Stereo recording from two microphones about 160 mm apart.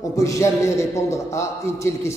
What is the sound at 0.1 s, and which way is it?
A man's voice, 20° left (ahead or behind).